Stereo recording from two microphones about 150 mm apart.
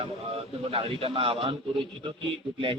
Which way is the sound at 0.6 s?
40° right (ahead or behind).